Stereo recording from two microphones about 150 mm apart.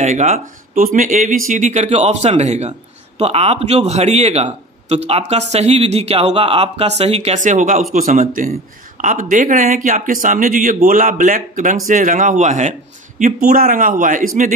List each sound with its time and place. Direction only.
0.0 s speech: 50° right (ahead or behind)
13.2 s speech: 80° right; by 14.5 s 60° right (ahead or behind)